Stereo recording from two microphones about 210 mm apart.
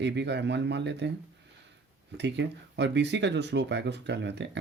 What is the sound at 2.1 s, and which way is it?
Speech, 55° right (ahead or behind).